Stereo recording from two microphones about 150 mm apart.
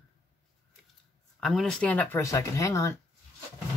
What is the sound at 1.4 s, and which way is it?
Speech, centre (ahead or behind).